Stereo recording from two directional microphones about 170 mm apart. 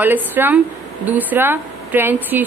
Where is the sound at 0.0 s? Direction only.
10° right (ahead or behind).